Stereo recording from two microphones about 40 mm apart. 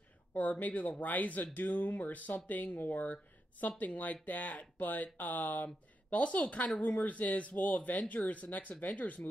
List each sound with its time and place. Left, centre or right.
0.3 s speech: left